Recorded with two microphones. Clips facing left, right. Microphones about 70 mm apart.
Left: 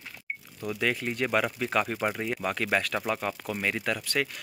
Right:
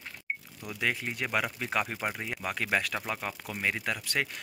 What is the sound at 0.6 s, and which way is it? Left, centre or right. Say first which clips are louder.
Speech: left 3 dB; centre.